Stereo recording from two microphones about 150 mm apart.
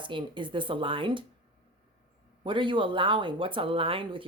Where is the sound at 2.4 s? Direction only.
35° right (ahead or behind).